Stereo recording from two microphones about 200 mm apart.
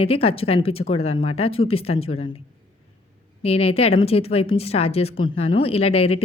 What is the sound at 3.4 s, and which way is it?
A woman's voice, 30° left (ahead or behind).